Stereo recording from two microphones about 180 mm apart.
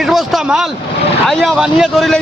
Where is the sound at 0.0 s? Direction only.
Centre (ahead or behind).